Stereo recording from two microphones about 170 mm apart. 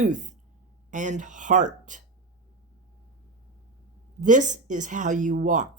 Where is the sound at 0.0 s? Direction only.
50° right (ahead or behind).